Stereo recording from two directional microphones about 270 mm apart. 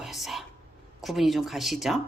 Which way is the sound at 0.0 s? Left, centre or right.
Centre.